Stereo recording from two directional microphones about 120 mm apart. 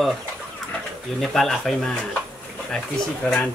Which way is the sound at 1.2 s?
Centre (ahead or behind).